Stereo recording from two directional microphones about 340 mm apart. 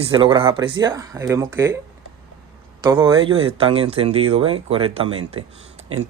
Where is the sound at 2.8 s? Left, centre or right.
Centre.